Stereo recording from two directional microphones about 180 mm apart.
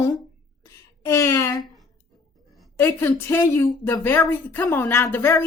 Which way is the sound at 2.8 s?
15° left (ahead or behind).